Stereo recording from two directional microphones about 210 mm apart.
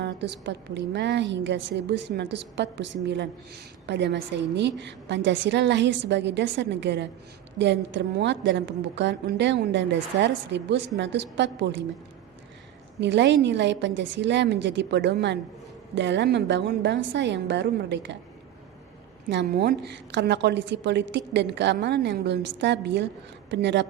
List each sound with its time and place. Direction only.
0.0 s a woman's voice: 55° right (ahead or behind)
13.0 s a woman's voice: 55° right (ahead or behind)
19.3 s a woman's voice: 55° right (ahead or behind)